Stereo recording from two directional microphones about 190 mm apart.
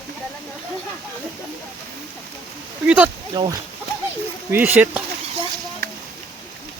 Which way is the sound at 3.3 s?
20° right (ahead or behind).